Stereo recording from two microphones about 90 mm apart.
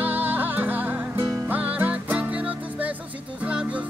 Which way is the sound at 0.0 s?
20° right (ahead or behind).